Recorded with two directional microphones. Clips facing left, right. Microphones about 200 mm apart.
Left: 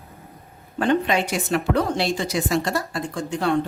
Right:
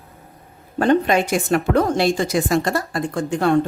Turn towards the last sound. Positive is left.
turn(degrees=-50)  # may be behind; listen again after turning